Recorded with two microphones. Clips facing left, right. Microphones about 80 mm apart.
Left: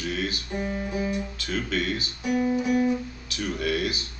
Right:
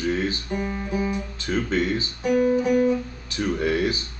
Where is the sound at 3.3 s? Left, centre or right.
Right.